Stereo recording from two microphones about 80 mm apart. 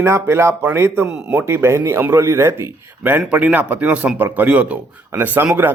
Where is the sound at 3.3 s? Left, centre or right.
Centre.